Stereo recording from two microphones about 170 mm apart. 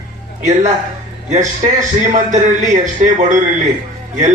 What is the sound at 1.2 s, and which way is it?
A man's voice, 45° right (ahead or behind).